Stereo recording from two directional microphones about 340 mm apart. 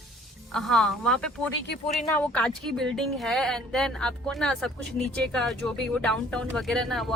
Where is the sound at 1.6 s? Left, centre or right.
Left.